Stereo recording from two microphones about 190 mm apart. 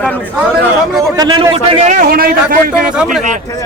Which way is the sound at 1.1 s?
20° right (ahead or behind).